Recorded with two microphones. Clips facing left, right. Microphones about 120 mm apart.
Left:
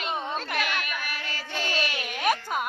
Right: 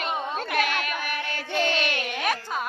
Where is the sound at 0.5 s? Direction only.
45° right (ahead or behind).